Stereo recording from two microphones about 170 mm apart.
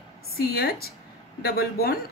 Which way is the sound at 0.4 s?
65° left (ahead or behind).